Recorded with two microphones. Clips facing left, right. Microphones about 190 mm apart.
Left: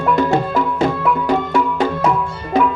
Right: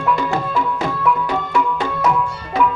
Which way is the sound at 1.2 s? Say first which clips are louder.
Left 3 dB; 40° left (ahead or behind).